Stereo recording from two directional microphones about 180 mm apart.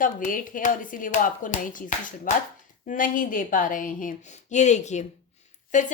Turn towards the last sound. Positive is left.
turn(degrees=45)  # may be behind; listen again after turning